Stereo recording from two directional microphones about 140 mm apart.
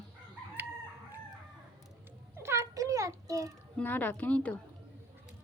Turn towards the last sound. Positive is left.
turn(degrees=10)  # may be behind; listen again after turning